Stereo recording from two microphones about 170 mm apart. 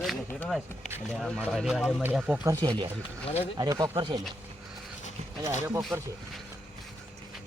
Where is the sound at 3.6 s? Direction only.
25° right (ahead or behind).